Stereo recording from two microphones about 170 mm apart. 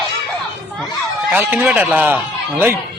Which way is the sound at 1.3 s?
10° right (ahead or behind).